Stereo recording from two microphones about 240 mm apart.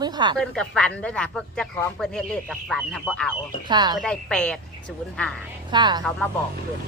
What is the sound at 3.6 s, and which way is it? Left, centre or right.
Speech, centre.